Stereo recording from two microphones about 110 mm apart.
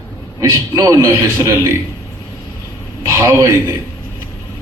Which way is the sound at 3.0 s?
30° right (ahead or behind).